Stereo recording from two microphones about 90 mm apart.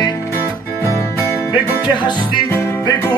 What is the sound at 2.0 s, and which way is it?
Music, 55° left (ahead or behind).